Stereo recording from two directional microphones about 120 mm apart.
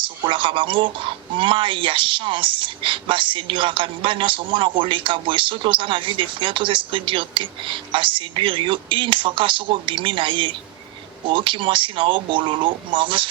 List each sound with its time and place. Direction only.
0.0 s speech: 45° right (ahead or behind)